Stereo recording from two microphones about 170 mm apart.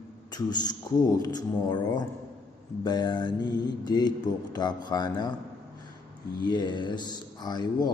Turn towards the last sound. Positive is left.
turn(degrees=25)  # may be behind; listen again after turning